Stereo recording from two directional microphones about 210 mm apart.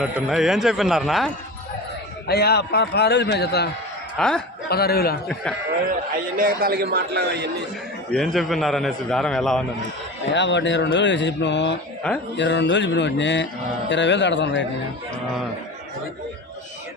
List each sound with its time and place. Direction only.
0.0 s a man's voice: centre (ahead or behind)
2.2 s a man's voice: 50° left (ahead or behind)
4.2 s a man's voice: 5° left (ahead or behind)
4.7 s a man's voice: 50° left (ahead or behind)
5.9 s a man's voice: 40° right (ahead or behind)
8.1 s a man's voice: centre (ahead or behind)
10.3 s speech: 55° left (ahead or behind)
12.0 s a man's voice: 5° left (ahead or behind)
12.4 s speech: 55° left (ahead or behind)